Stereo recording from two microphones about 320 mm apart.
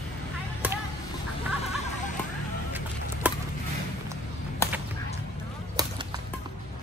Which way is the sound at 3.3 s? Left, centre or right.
Centre.